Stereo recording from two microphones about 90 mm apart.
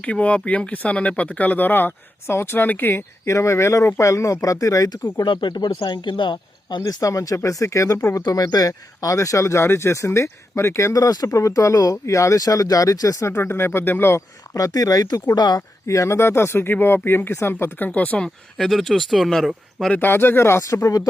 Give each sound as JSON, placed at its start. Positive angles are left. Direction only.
{"t": 0.0, "sound": "speech", "side_deg": 15}
{"t": 5.1, "sound": "speech", "side_deg": 60}
{"t": 6.8, "sound": "speech", "side_deg": 35}
{"t": 8.2, "sound": "speech", "side_deg": 50}
{"t": 13.3, "sound": "speech", "side_deg": 25}
{"t": 14.5, "sound": "speech", "side_deg": 40}
{"t": 15.4, "sound": "speech", "side_deg": 50}
{"t": 15.9, "sound": "speech", "side_deg": 35}
{"t": 18.5, "sound": "speech", "side_deg": 5}
{"t": 19.9, "sound": "speech", "side_deg": 20}